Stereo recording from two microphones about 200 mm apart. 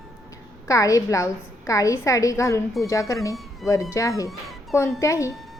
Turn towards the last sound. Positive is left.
turn(degrees=15)  # may be behind; listen again after turning